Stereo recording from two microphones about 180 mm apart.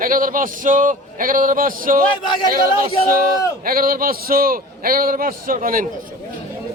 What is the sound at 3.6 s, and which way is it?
A man's voice, 55° right (ahead or behind).